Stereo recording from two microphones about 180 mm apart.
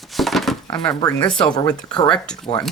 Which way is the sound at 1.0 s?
20° left (ahead or behind).